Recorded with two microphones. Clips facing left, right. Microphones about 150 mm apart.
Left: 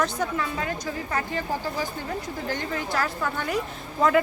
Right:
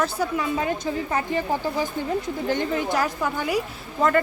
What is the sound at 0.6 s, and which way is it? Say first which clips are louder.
A woman's voice: right 5 dB; 20° right (ahead or behind).